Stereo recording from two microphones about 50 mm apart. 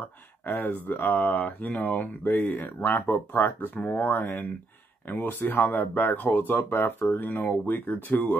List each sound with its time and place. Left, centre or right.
0.5 s speech: left